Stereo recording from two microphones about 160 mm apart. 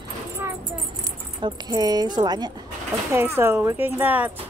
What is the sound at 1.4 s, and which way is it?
Speech, 25° right (ahead or behind).